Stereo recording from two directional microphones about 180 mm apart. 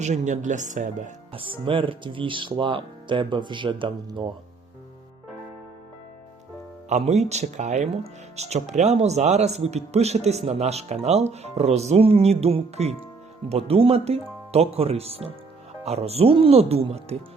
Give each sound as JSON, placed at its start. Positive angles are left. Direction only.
{"t": 0.0, "sound": "speech", "side_deg": -40}
{"t": 1.3, "sound": "speech", "side_deg": -30}
{"t": 6.8, "sound": "speech", "side_deg": -40}